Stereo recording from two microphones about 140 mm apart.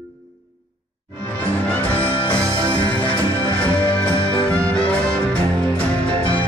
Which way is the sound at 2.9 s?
10° left (ahead or behind).